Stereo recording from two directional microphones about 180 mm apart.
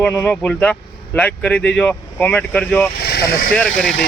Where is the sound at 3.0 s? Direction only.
60° left (ahead or behind).